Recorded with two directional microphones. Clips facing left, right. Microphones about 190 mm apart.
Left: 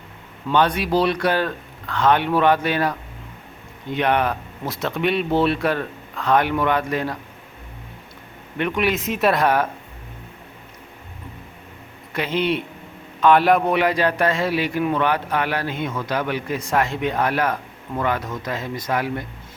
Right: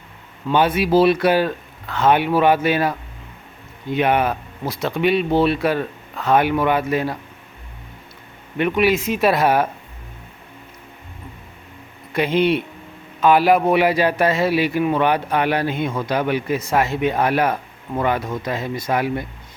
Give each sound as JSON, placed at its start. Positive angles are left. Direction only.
{"t": 0.5, "sound": "a man's voice", "side_deg": -10}
{"t": 3.9, "sound": "speech", "side_deg": -5}
{"t": 8.5, "sound": "speech", "side_deg": -5}
{"t": 12.1, "sound": "a man's voice", "side_deg": -10}